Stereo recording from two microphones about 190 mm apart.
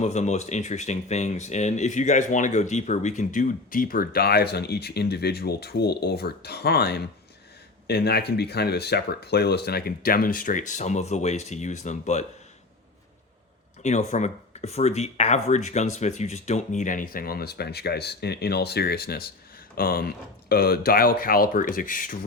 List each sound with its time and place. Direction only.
0.0 s speech: 35° left (ahead or behind)
13.8 s speech: 35° left (ahead or behind)